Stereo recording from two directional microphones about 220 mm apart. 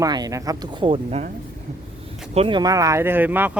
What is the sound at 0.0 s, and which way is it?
Speech, 15° right (ahead or behind).